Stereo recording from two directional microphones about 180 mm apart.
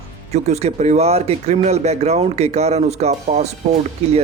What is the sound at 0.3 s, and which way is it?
Speech, 40° right (ahead or behind).